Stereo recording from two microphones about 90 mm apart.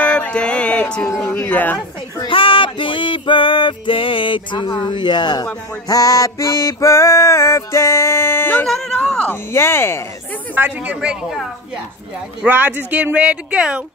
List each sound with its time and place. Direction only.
0.0 s a sound: 15° left (ahead or behind)
1.2 s music: 30° left (ahead or behind)
1.5 s speech: 20° left (ahead or behind)
2.2 s music: 75° left (ahead or behind); by 5.5 s 55° left (ahead or behind)
5.9 s music: 40° left (ahead or behind); by 8.6 s 25° left (ahead or behind)
8.6 s a sound: 5° left (ahead or behind)
9.3 s speech: 30° left (ahead or behind)
10.5 s speech: 20° right (ahead or behind)
12.4 s speech: 20° right (ahead or behind)